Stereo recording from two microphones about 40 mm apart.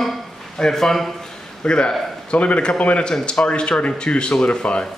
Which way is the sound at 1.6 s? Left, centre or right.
Left.